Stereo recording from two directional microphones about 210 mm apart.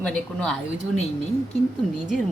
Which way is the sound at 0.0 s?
5° left (ahead or behind).